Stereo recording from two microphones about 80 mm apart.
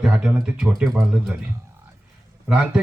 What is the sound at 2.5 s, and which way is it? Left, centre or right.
Speech, centre.